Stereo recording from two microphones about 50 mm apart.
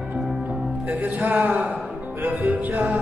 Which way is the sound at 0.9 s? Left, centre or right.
Right.